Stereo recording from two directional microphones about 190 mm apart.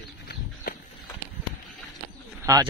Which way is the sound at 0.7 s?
45° left (ahead or behind).